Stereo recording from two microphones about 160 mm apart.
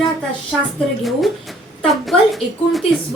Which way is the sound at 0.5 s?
5° left (ahead or behind).